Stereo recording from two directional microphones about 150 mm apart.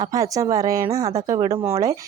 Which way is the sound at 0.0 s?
25° right (ahead or behind).